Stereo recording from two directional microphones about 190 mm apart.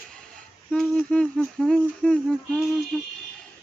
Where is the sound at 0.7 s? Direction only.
5° left (ahead or behind).